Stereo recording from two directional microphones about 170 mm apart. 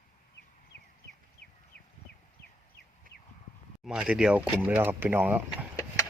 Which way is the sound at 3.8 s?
5° right (ahead or behind).